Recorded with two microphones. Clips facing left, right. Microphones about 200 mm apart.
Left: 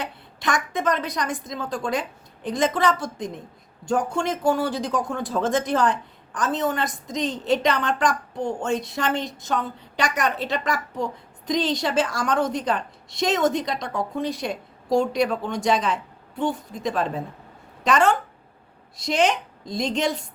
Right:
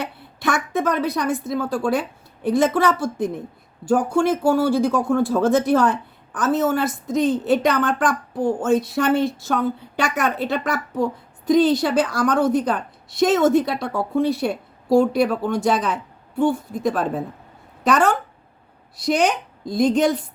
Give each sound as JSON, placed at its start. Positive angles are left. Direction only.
{"t": 0.4, "sound": "a woman's voice", "side_deg": -5}
{"t": 3.2, "sound": "a woman's voice", "side_deg": -60}
{"t": 3.8, "sound": "a woman's voice", "side_deg": -5}